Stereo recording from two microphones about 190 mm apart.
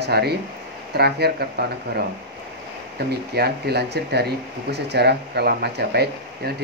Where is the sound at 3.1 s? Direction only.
60° right (ahead or behind).